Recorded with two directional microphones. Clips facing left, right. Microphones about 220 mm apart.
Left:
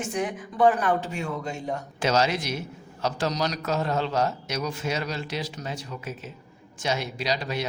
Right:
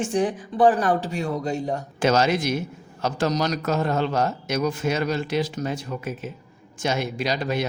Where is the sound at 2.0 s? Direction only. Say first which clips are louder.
Right 4 dB; 50° right (ahead or behind).